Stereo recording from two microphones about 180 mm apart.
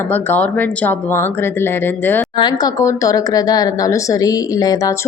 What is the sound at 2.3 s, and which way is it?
Speech, 25° left (ahead or behind).